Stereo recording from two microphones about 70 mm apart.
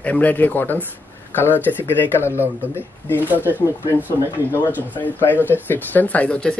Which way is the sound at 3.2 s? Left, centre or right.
Right.